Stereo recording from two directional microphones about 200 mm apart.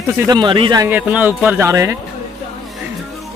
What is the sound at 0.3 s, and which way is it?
Speech, 25° right (ahead or behind).